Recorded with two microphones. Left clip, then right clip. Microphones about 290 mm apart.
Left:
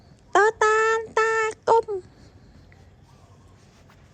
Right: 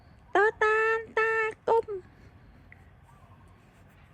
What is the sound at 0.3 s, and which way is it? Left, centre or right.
Child singing, left.